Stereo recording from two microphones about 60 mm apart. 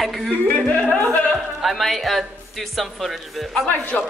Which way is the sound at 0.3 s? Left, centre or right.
Centre.